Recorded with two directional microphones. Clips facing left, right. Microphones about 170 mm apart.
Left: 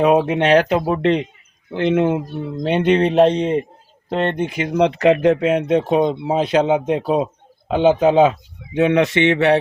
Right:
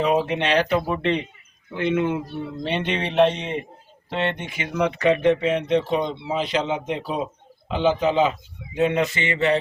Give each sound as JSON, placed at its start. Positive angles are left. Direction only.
{"t": 0.0, "sound": "speech", "side_deg": 60}
{"t": 1.7, "sound": "speech", "side_deg": 75}
{"t": 2.0, "sound": "speech", "side_deg": 45}
{"t": 8.7, "sound": "speech", "side_deg": 70}